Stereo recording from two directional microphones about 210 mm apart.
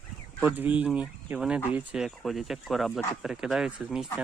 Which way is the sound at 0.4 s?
10° right (ahead or behind).